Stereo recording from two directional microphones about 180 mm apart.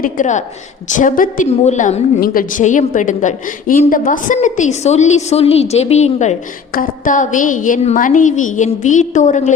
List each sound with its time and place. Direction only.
0.0 s a woman's voice: 45° left (ahead or behind)